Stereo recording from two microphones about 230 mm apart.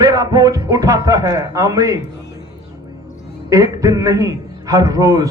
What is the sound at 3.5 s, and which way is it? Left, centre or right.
A man's voice, centre.